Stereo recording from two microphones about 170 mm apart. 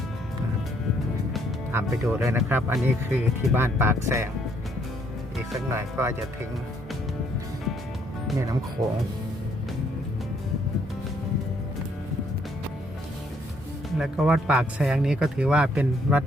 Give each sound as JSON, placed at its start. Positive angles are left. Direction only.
{"t": 1.7, "sound": "speech", "side_deg": -15}
{"t": 5.7, "sound": "speech", "side_deg": -15}
{"t": 14.0, "sound": "speech", "side_deg": -5}